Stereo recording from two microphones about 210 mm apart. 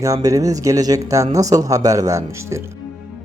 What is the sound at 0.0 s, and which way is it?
Speech, 15° right (ahead or behind).